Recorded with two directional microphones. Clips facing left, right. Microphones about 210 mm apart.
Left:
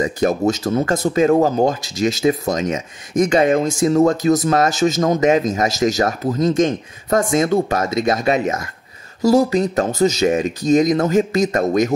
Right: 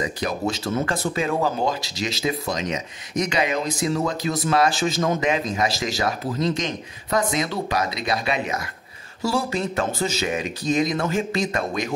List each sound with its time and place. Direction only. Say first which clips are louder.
0.0 s speech: left 8 dB; 45° left (ahead or behind)